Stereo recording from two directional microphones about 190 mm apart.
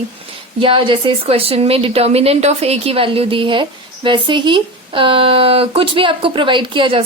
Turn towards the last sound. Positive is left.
turn(degrees=-25)  # may be behind; listen again after turning